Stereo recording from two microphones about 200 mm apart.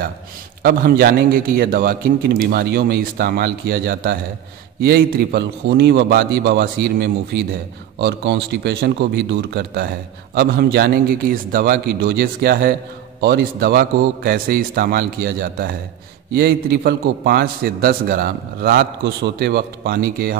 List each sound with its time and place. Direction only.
0.6 s a man's voice: 50° right (ahead or behind)